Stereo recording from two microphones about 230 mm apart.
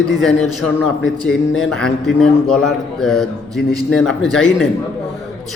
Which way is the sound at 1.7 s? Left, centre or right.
Centre.